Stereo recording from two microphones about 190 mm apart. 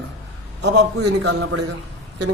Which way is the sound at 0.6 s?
65° right (ahead or behind).